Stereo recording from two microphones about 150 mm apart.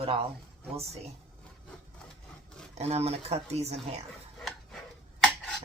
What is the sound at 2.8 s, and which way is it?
A woman's voice, 45° right (ahead or behind).